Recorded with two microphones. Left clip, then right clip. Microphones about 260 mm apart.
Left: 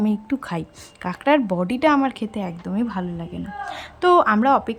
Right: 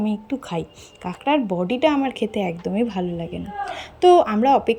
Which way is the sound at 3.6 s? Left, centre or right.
Left.